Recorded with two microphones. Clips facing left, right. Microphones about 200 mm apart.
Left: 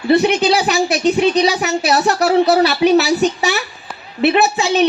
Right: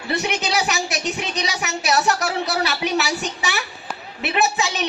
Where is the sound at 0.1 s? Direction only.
30° left (ahead or behind).